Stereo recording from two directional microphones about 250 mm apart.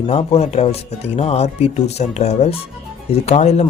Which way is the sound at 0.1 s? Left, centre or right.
Left.